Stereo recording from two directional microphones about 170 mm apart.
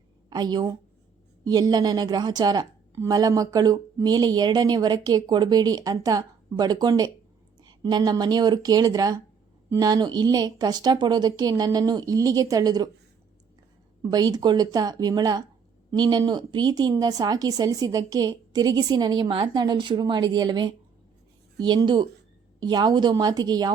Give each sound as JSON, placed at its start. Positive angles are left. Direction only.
{"t": 0.3, "sound": "a woman's voice", "side_deg": -25}
{"t": 14.0, "sound": "a woman's voice", "side_deg": -25}